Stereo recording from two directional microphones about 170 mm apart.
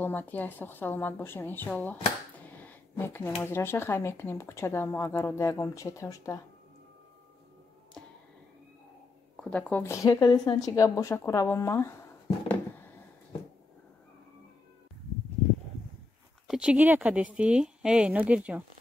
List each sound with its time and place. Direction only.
0.0 s speech: 10° left (ahead or behind)
2.5 s a sound: 10° left (ahead or behind)
3.4 s speech: 15° left (ahead or behind)
9.4 s a woman's voice: 5° left (ahead or behind)
16.4 s speech: 5° right (ahead or behind)